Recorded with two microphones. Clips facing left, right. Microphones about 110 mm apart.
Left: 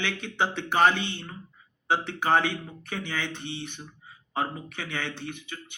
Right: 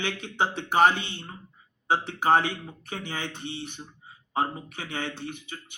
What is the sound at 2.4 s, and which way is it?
Speech, 30° right (ahead or behind).